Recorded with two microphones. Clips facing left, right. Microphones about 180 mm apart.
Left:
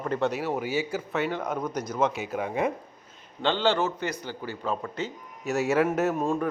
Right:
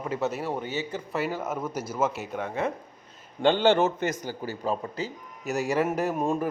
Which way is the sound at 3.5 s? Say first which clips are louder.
Right 4 dB; 50° right (ahead or behind).